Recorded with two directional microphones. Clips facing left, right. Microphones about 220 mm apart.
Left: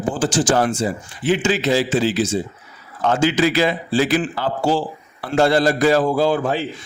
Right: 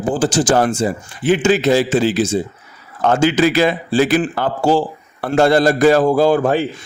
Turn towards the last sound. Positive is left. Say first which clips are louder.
# right 5 dB
turn(degrees=-50)  # may be behind; listen again after turning